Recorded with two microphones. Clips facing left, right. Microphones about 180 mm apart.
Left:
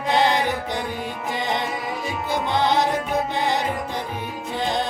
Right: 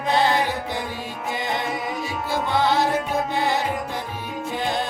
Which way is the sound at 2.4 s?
20° left (ahead or behind).